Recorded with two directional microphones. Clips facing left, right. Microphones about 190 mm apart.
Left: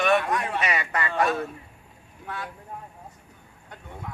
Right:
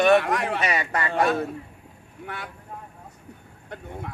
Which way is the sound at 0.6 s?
35° right (ahead or behind).